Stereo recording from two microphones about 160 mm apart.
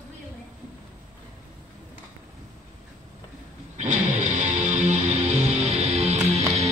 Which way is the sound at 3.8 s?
45° right (ahead or behind).